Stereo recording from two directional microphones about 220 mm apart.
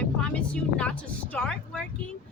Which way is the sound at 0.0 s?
5° left (ahead or behind).